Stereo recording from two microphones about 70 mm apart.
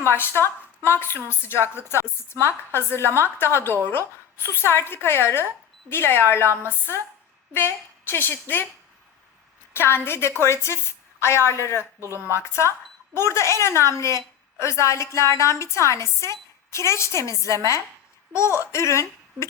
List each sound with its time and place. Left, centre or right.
0.1 s a woman's voice: left
9.7 s a woman's voice: left